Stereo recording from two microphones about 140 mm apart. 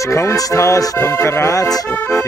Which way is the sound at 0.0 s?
20° left (ahead or behind).